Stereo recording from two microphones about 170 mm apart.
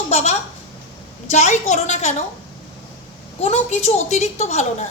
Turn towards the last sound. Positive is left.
turn(degrees=40)  # may be behind; listen again after turning